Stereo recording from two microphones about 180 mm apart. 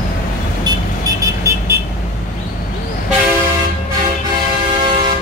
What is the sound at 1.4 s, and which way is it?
Vehicle, 15° right (ahead or behind).